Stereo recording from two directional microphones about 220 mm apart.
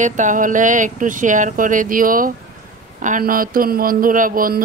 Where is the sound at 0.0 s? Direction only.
35° right (ahead or behind).